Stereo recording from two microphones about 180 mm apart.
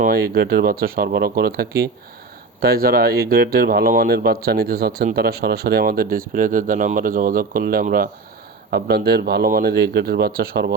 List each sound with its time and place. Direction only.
0.0 s speech: 60° right (ahead or behind)